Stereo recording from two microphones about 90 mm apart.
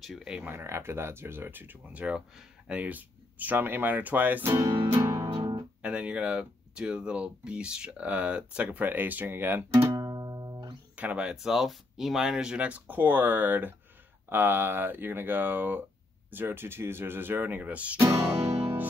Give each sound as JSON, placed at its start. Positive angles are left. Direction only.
{"t": 0.0, "sound": "speech", "side_deg": -5}
{"t": 0.4, "sound": "speech", "side_deg": -25}
{"t": 4.5, "sound": "music", "side_deg": -30}
{"t": 5.3, "sound": "guitar", "side_deg": -65}
{"t": 5.8, "sound": "speech", "side_deg": -10}
{"t": 9.7, "sound": "music", "side_deg": -30}
{"t": 9.9, "sound": "music", "side_deg": -40}
{"t": 11.0, "sound": "speech", "side_deg": -15}
{"t": 18.6, "sound": "music", "side_deg": -20}